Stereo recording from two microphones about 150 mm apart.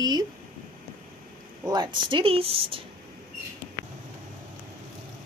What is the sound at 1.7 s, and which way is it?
Speech, 30° right (ahead or behind).